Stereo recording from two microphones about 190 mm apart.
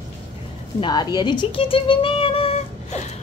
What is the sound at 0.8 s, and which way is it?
Speech, 20° left (ahead or behind).